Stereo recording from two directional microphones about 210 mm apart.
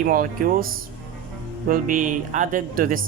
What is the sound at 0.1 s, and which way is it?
Speech, 40° right (ahead or behind).